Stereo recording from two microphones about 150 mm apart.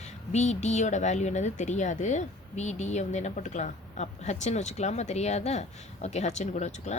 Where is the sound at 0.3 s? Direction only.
50° left (ahead or behind).